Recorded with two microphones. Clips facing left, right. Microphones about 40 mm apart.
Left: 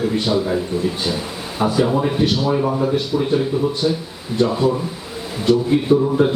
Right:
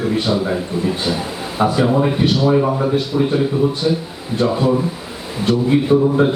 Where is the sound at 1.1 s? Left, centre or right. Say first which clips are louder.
Right 2 dB; centre.